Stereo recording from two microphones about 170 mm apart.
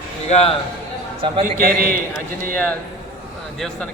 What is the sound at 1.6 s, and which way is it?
Speech, 60° right (ahead or behind).